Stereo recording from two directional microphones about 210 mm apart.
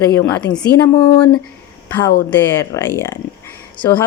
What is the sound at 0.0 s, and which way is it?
Speech, 15° left (ahead or behind).